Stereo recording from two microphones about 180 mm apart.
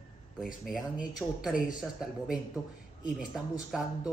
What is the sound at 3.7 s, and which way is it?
Speech, centre (ahead or behind).